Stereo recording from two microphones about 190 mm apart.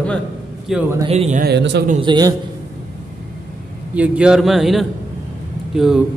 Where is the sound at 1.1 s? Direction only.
35° right (ahead or behind).